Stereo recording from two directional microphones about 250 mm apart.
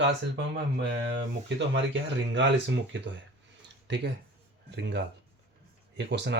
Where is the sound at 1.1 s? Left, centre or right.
Right.